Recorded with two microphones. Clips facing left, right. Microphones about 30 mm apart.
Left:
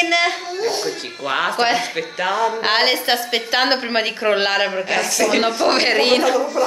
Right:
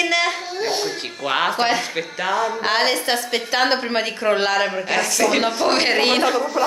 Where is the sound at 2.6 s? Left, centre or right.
Left.